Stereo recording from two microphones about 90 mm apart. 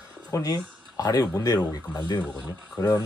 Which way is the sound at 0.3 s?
45° left (ahead or behind).